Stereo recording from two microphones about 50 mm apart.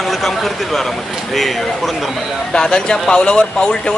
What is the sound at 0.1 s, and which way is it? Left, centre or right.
Speech, centre.